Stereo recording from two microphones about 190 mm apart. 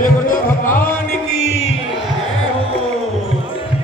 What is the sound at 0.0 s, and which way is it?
Music, 45° left (ahead or behind).